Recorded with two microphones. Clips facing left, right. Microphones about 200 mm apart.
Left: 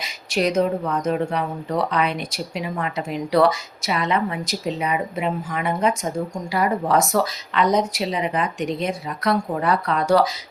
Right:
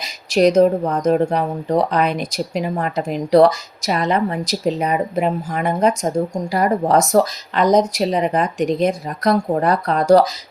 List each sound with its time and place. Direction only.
0.0 s speech: 40° right (ahead or behind)